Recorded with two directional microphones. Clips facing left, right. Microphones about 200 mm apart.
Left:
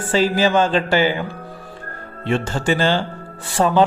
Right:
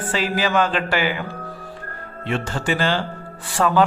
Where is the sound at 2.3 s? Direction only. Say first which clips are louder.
Left 4 dB; 30° left (ahead or behind).